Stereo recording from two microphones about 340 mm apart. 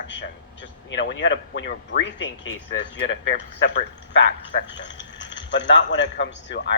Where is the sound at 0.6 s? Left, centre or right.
Left.